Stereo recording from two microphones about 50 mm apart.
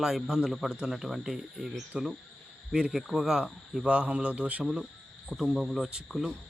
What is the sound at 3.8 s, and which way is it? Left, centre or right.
Mantra, right.